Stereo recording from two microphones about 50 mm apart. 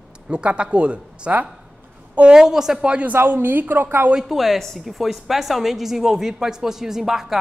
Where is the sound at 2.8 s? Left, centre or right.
Right.